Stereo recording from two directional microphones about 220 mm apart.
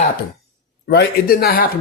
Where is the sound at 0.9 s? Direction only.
45° left (ahead or behind).